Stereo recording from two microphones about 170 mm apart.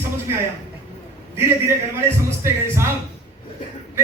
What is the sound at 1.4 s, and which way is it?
Speech, 15° right (ahead or behind).